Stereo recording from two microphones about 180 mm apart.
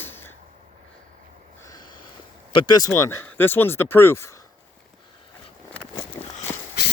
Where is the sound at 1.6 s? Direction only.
20° left (ahead or behind).